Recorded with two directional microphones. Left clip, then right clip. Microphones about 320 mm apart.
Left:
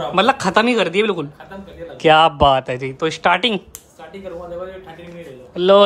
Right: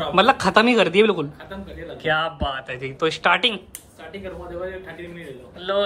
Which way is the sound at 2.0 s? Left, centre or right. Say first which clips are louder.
Left 11 dB; left.